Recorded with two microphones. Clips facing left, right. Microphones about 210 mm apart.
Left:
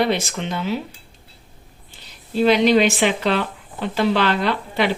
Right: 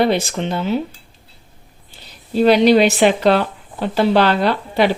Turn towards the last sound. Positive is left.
turn(degrees=-40)  # may be behind; listen again after turning